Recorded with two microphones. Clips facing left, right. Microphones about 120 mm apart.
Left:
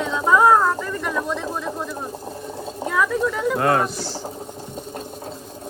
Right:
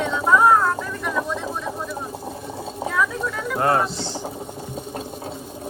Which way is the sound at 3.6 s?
25° right (ahead or behind).